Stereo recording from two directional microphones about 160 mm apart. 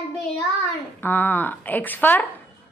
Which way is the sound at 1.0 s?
10° left (ahead or behind).